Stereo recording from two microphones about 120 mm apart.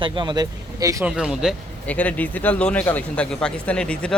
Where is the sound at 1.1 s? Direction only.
5° right (ahead or behind).